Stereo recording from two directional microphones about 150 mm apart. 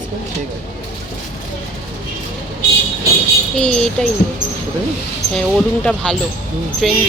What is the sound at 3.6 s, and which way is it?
Speech, 5° left (ahead or behind).